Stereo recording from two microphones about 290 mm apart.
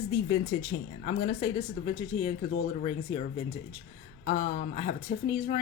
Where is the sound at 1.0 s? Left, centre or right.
Left.